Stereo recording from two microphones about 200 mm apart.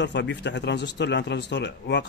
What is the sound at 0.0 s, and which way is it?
Speech, 60° left (ahead or behind).